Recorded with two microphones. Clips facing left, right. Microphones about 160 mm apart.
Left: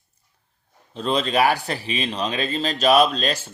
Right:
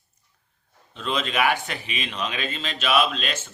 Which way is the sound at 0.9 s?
35° left (ahead or behind).